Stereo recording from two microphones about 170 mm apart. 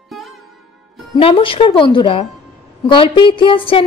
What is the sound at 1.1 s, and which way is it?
A woman's voice, 30° left (ahead or behind).